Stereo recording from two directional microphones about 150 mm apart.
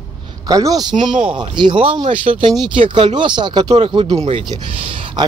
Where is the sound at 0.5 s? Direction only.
25° right (ahead or behind).